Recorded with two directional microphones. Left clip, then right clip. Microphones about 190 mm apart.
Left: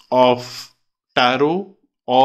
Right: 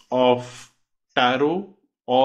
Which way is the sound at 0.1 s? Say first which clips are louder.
Left 4 dB; 30° left (ahead or behind).